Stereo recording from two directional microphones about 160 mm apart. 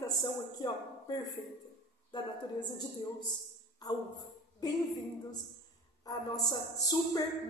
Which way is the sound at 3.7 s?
25° left (ahead or behind).